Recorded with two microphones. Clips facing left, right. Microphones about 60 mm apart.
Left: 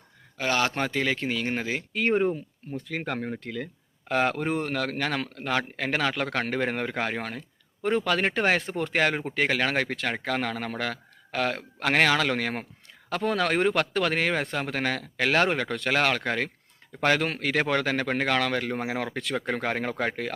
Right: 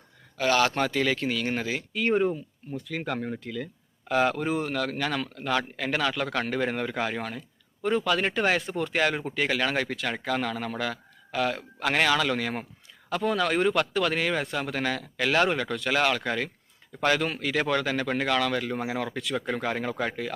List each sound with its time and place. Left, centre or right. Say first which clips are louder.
0.3 s a man's voice: right 2 dB; left
1.9 s speech: left 1 dB; left
2.1 s speech: even; left
2.7 s speech: even; left